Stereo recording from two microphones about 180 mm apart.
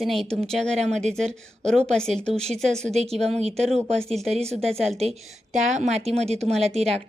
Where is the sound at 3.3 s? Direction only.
35° right (ahead or behind).